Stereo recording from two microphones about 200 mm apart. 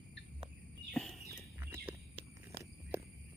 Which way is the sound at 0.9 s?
Centre (ahead or behind).